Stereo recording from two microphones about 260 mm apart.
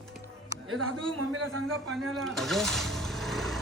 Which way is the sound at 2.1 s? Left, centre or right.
Centre.